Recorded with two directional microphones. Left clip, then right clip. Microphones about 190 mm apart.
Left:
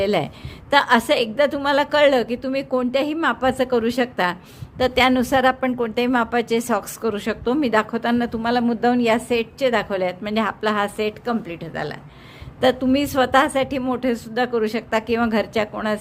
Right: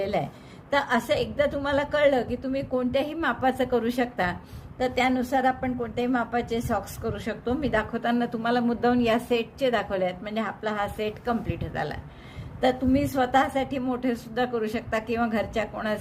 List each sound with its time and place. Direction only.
0.0 s a woman's voice: 35° left (ahead or behind)
4.8 s a woman's voice: 40° left (ahead or behind); by 11.9 s 20° left (ahead or behind)
12.5 s a woman's voice: 40° left (ahead or behind)